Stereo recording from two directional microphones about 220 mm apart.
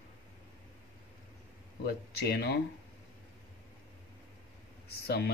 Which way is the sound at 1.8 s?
45° left (ahead or behind).